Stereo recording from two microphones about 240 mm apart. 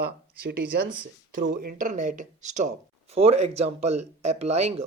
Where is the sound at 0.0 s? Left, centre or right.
Right.